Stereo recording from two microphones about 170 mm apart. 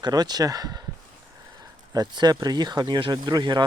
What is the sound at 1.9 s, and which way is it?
Speech, 25° right (ahead or behind).